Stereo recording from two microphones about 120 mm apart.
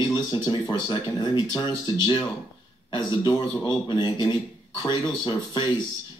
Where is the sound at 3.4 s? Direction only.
40° left (ahead or behind).